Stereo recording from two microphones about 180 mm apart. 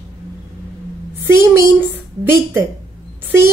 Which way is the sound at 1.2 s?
15° right (ahead or behind).